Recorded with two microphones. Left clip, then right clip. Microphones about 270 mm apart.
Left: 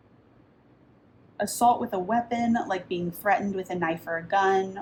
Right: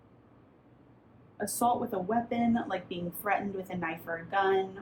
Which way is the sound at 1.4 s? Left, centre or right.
Left.